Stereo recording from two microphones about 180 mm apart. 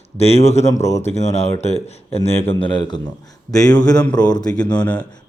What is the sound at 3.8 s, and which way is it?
Speech, 5° left (ahead or behind).